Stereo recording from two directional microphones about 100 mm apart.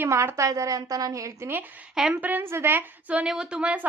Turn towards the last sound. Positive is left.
turn(degrees=-10)  # may be behind; listen again after turning